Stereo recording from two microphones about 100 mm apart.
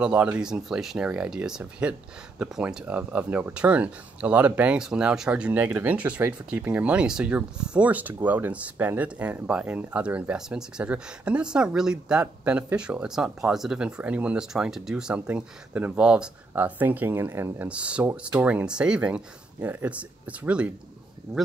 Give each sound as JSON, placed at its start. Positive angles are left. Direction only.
{"t": 0.0, "sound": "speech", "side_deg": -10}
{"t": 17.6, "sound": "speech", "side_deg": -10}